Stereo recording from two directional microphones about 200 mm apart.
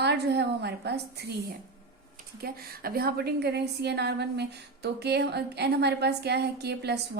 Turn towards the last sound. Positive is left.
turn(degrees=-55)  # may be behind; listen again after turning